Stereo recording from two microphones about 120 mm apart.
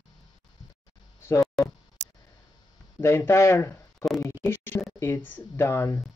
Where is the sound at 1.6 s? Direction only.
Centre (ahead or behind).